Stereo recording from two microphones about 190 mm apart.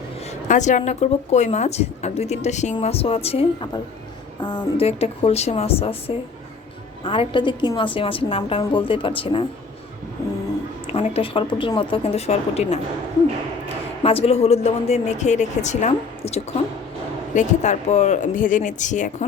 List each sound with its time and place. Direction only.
0.4 s a woman's voice: 40° left (ahead or behind)
10.9 s speech: 30° left (ahead or behind)
14.0 s speech: 30° left (ahead or behind)